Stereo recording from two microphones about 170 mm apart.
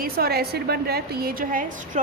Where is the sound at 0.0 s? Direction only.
65° right (ahead or behind).